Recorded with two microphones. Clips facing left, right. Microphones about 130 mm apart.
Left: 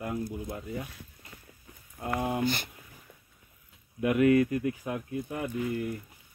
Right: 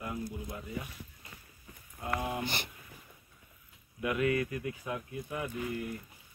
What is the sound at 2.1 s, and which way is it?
Speech, 40° left (ahead or behind).